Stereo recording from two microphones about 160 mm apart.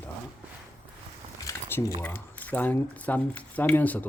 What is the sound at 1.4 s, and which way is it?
Speech, 20° left (ahead or behind).